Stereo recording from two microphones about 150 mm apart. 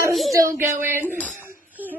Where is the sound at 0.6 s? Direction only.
15° right (ahead or behind).